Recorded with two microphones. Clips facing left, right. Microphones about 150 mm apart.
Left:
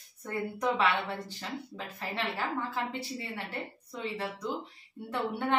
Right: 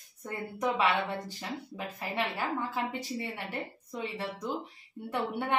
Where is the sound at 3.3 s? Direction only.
15° right (ahead or behind).